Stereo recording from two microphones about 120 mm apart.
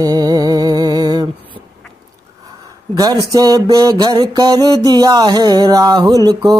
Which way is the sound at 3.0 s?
30° right (ahead or behind).